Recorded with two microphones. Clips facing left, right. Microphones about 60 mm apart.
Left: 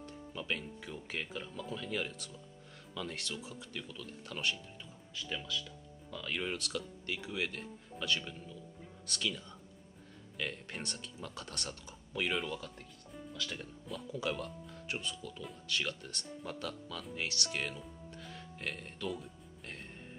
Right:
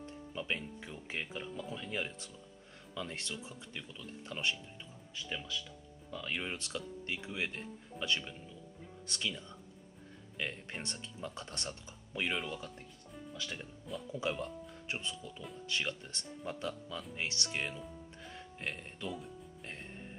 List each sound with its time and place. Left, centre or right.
0.3 s speech: centre
5.1 s speech: centre
13.9 s speech: centre
14.4 s speech: right
18.1 s music: right
18.8 s speech: centre